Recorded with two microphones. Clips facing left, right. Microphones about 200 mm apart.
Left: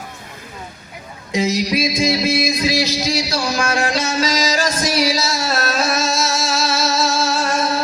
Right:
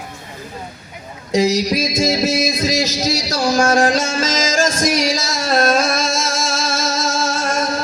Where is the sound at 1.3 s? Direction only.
40° right (ahead or behind).